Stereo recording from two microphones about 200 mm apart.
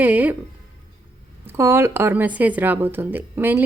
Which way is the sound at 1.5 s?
10° right (ahead or behind).